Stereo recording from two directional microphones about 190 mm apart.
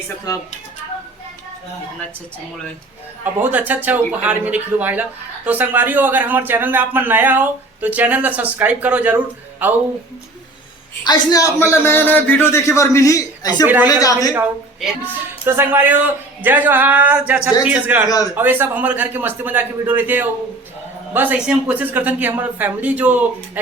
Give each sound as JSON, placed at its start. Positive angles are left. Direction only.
{"t": 3.4, "sound": "a man's voice", "side_deg": -10}
{"t": 11.0, "sound": "a man's voice", "side_deg": 20}
{"t": 14.3, "sound": "a woman's voice", "side_deg": -10}